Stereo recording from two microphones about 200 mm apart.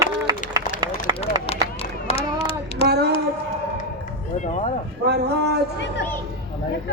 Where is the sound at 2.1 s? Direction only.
30° left (ahead or behind).